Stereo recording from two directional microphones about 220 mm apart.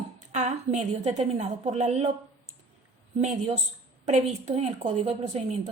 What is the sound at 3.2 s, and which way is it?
A woman's voice, 30° right (ahead or behind).